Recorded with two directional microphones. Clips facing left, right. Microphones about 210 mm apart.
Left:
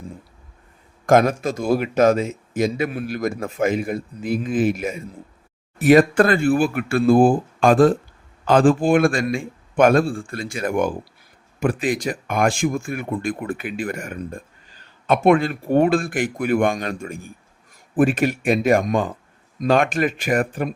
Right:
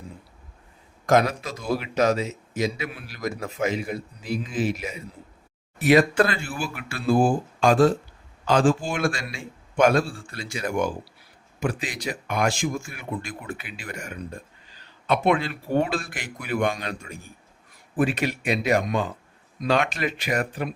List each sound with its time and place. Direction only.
1.0 s speech: 50° left (ahead or behind)